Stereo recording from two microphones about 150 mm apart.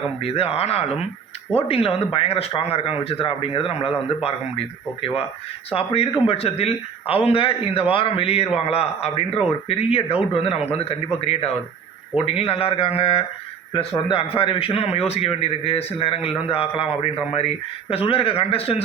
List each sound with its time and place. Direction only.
0.2 s a man's voice: 40° left (ahead or behind)
5.7 s a man's voice: 40° left (ahead or behind)